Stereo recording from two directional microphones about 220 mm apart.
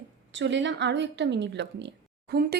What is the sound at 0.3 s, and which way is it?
Speech, 55° right (ahead or behind).